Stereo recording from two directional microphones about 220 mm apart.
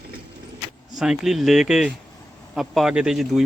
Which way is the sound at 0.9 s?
Centre (ahead or behind).